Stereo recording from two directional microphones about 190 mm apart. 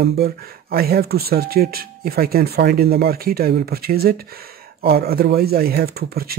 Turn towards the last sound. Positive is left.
turn(degrees=-55)  # may be behind; listen again after turning